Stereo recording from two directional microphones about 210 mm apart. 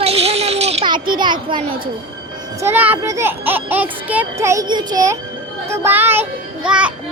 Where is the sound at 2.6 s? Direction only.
10° right (ahead or behind).